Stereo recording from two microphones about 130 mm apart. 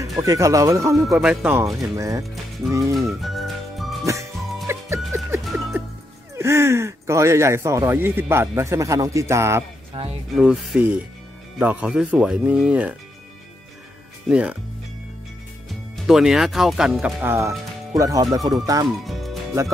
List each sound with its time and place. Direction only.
0.2 s speech: 25° right (ahead or behind)
1.2 s speech: 10° right (ahead or behind)
1.8 s speech: 25° right (ahead or behind)
3.1 s music: centre (ahead or behind)
4.0 s music: 25° right (ahead or behind)
5.4 s music: centre (ahead or behind)
6.3 s speech: 20° right (ahead or behind)
9.9 s speech: 45° right (ahead or behind)
10.3 s speech: 5° right (ahead or behind)
14.3 s speech: 10° right (ahead or behind)
16.1 s speech: 5° right (ahead or behind)
17.2 s speech: 20° right (ahead or behind)
19.0 s music: centre (ahead or behind)